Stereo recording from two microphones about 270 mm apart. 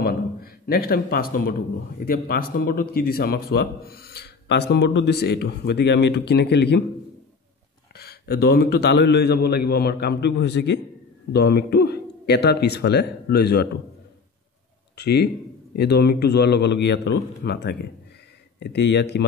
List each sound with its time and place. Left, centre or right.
0.0 s a man's voice: left
7.9 s a man's voice: left
15.0 s a man's voice: left